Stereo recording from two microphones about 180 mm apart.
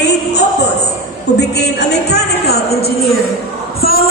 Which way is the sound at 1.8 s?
60° left (ahead or behind).